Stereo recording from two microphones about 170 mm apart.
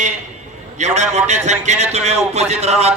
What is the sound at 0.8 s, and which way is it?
A man's voice, 40° right (ahead or behind).